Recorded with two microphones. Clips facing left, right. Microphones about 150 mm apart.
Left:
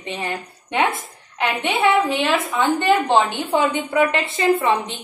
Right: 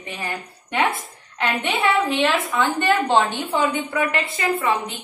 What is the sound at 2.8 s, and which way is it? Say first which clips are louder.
A woman's voice: left 1 dB; 15° left (ahead or behind).